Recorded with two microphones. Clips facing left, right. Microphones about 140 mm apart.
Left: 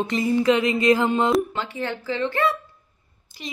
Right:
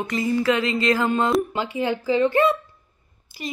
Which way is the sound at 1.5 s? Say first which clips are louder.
Right 4 dB; 15° right (ahead or behind).